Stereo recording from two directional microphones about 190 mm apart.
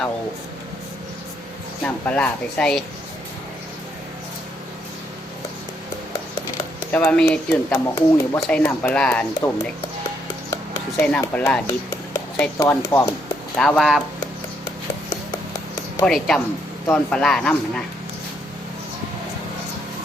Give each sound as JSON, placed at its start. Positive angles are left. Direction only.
{"t": 1.8, "sound": "speech", "side_deg": 5}
{"t": 6.9, "sound": "speech", "side_deg": 5}
{"t": 11.0, "sound": "speech", "side_deg": 5}
{"t": 13.6, "sound": "speech", "side_deg": 5}
{"t": 16.0, "sound": "speech", "side_deg": 5}